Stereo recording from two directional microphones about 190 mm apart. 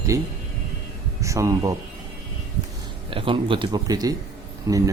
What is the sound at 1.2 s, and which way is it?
Speech, 15° right (ahead or behind).